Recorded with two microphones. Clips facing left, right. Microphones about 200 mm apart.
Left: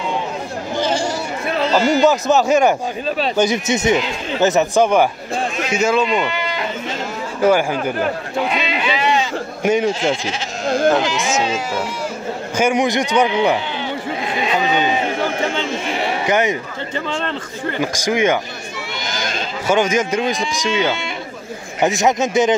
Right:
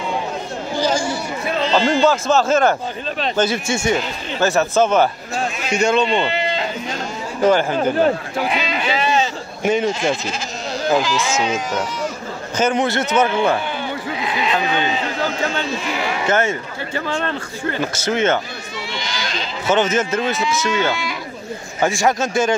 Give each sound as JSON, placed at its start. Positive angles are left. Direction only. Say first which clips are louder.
{"t": 1.7, "sound": "a man's voice", "louder": "left 2 dB", "side_deg": 10}
{"t": 6.0, "sound": "speech", "louder": "right 1 dB", "side_deg": -30}
{"t": 7.4, "sound": "a man's voice", "louder": "even", "side_deg": 10}
{"t": 8.4, "sound": "a sound", "louder": "left 1 dB", "side_deg": 0}
{"t": 8.9, "sound": "sheep", "louder": "even", "side_deg": -30}
{"t": 9.6, "sound": "a man's voice", "louder": "left 1 dB", "side_deg": 10}
{"t": 11.0, "sound": "speech", "louder": "left 1 dB", "side_deg": 20}
{"t": 12.5, "sound": "a man's voice", "louder": "left 1 dB", "side_deg": 15}
{"t": 14.2, "sound": "sheep", "louder": "right 1 dB", "side_deg": 45}
{"t": 16.3, "sound": "a man's voice", "louder": "left 1 dB", "side_deg": 15}
{"t": 19.0, "sound": "a sound", "louder": "left 5 dB", "side_deg": 50}
{"t": 19.7, "sound": "a man's voice", "louder": "left 1 dB", "side_deg": 10}